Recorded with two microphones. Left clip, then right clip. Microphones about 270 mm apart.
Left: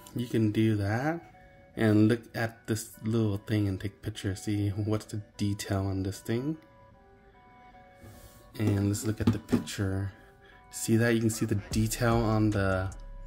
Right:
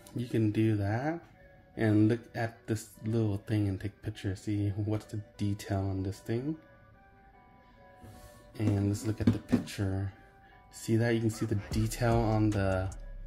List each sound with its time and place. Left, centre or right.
0.0 s speech: centre
8.5 s speech: centre